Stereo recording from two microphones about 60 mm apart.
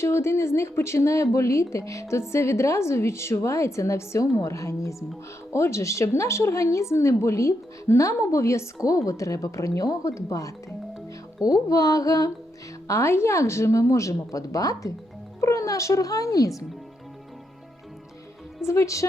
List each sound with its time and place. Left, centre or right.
0.0 s a woman's voice: left
11.4 s mantra: left
12.9 s a woman's voice: left
15.4 s a woman's voice: left
18.6 s a woman's voice: left